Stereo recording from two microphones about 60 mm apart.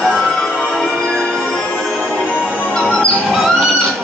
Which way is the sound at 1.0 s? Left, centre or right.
Centre.